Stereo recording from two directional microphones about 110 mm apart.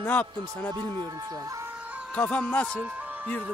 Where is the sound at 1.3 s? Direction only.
30° right (ahead or behind).